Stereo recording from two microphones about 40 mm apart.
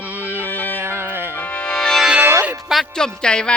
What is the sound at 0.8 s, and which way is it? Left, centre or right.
Music, right.